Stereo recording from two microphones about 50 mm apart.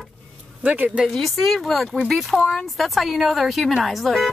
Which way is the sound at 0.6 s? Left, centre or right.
Right.